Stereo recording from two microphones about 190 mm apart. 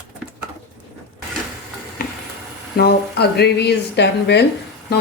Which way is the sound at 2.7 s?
55° left (ahead or behind).